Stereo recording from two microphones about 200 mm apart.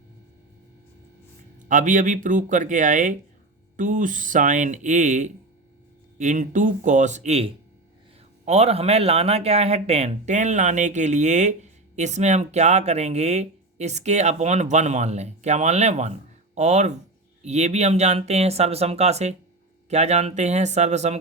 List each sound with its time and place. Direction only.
1.6 s speech: 40° right (ahead or behind)